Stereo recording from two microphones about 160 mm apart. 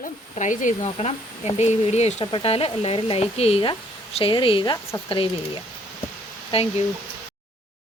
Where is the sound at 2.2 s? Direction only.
35° left (ahead or behind).